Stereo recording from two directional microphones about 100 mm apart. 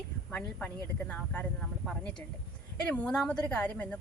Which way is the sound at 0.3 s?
15° left (ahead or behind).